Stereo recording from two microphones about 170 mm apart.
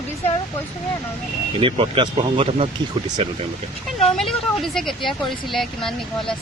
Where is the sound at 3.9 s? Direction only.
Centre (ahead or behind).